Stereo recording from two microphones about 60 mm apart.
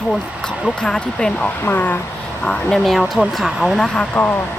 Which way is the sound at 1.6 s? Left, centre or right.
Left.